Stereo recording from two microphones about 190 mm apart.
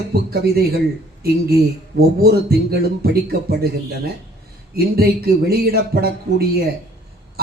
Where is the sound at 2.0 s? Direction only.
55° right (ahead or behind).